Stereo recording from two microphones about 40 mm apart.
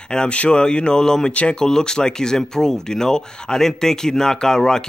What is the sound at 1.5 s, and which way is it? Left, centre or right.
Speech, centre.